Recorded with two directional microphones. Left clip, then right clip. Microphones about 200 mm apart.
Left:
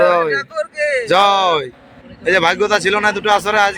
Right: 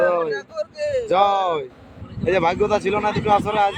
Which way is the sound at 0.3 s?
40° left (ahead or behind).